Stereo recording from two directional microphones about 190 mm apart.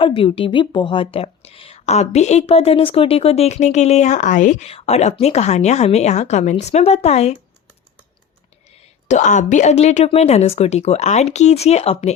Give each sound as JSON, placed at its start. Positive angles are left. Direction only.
{"t": 0.0, "sound": "a woman's voice", "side_deg": 30}
{"t": 9.0, "sound": "a woman's voice", "side_deg": 40}